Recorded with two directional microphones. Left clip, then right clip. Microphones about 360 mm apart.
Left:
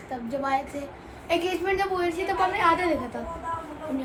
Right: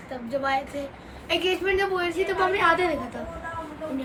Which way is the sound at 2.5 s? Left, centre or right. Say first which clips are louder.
Right 2 dB; centre.